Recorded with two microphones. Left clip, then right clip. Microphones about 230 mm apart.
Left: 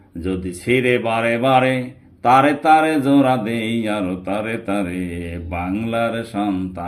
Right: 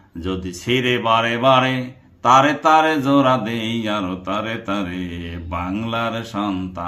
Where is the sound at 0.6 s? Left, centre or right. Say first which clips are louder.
Left 2 dB; right.